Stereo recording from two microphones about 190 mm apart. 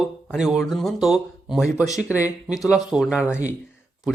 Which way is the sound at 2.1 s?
15° left (ahead or behind).